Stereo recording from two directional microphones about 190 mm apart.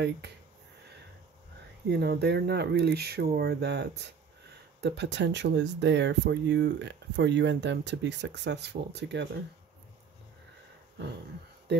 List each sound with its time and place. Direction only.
1.9 s speech: 60° right (ahead or behind)